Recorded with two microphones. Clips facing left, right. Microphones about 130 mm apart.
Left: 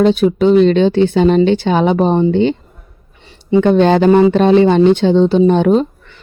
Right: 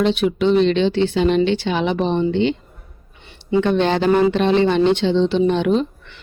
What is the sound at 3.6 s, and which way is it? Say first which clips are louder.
Speech: left 7 dB; 45° left (ahead or behind).